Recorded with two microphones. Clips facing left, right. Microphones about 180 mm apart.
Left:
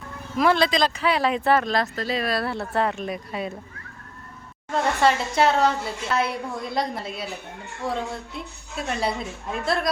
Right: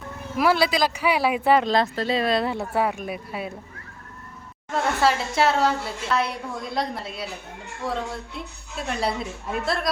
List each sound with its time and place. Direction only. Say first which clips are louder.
0.3 s speech: left 1 dB; 10° right (ahead or behind)
1.6 s speech: right 3 dB; 25° right (ahead or behind); by 3.5 s 5° right (ahead or behind)
4.7 s a woman's voice: left 1 dB; centre (ahead or behind)